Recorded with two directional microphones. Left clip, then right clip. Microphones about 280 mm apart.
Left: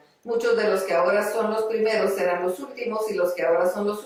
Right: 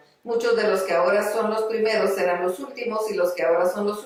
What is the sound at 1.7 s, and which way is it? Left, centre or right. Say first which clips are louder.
Speech: right 1 dB; centre.